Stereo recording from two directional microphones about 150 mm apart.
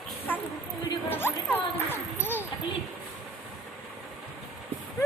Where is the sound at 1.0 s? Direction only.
15° left (ahead or behind).